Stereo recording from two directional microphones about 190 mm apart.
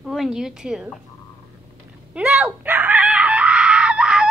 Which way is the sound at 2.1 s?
5° right (ahead or behind).